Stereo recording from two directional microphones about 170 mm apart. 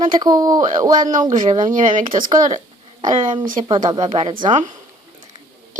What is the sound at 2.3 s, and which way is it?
Speech, 25° right (ahead or behind).